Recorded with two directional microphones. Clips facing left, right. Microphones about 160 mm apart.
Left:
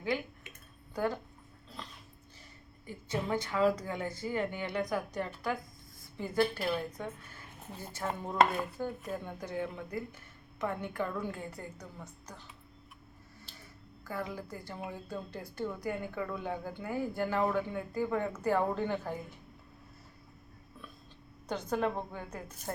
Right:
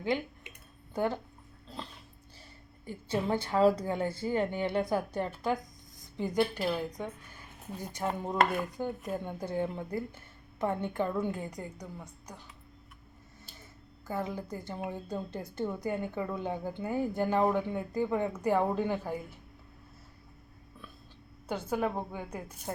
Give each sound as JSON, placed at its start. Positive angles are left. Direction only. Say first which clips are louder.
{"t": 0.0, "sound": "a sound", "louder": "right 3 dB", "side_deg": -25}
{"t": 0.9, "sound": "a woman's voice", "louder": "right 2 dB", "side_deg": -25}
{"t": 2.8, "sound": "a woman's voice", "louder": "right 4 dB", "side_deg": -30}
{"t": 14.0, "sound": "a woman's voice", "louder": "right 3 dB", "side_deg": -20}
{"t": 21.4, "sound": "a woman's voice", "louder": "right 1 dB", "side_deg": -10}